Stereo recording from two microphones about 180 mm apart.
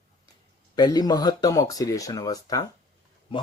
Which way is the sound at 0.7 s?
20° left (ahead or behind).